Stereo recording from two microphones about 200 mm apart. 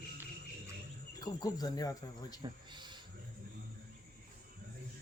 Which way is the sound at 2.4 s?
20° right (ahead or behind).